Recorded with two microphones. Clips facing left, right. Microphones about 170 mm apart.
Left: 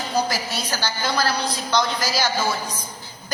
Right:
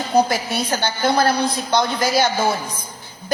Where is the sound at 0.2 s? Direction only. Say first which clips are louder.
Right 7 dB; 55° right (ahead or behind).